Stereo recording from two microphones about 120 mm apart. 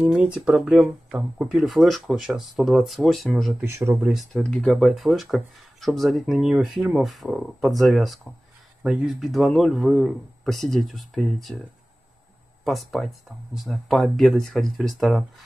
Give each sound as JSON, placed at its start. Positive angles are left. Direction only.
{"t": 0.0, "sound": "speech", "side_deg": -5}
{"t": 3.6, "sound": "speech", "side_deg": -25}
{"t": 4.0, "sound": "speech", "side_deg": 0}
{"t": 4.4, "sound": "speech", "side_deg": 10}
{"t": 12.6, "sound": "speech", "side_deg": 0}